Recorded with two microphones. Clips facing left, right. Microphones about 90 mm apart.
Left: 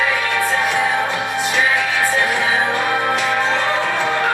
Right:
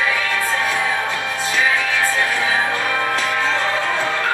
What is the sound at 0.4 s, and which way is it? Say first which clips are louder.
Music: left 3 dB; 20° left (ahead or behind).